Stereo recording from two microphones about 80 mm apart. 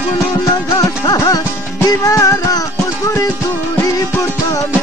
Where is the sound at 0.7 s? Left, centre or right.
Left.